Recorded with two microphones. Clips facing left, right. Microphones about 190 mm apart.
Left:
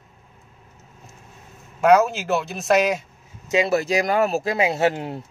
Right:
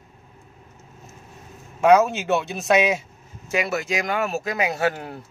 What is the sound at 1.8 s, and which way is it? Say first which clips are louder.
Speech: even; centre (ahead or behind).